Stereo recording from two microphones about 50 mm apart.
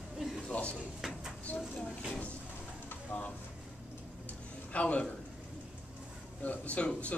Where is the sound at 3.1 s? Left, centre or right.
Left.